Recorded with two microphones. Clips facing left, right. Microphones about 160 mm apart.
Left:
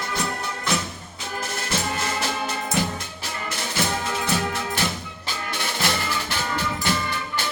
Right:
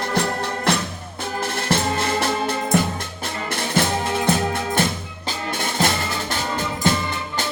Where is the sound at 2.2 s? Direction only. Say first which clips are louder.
Right 5 dB; 55° right (ahead or behind).